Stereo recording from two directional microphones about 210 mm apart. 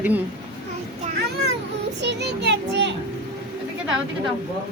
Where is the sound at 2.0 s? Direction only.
55° right (ahead or behind).